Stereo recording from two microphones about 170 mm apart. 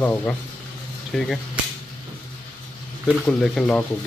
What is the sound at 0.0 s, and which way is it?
Speech, 10° left (ahead or behind).